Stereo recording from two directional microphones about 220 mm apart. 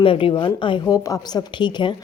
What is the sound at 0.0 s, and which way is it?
A woman's voice, 25° left (ahead or behind).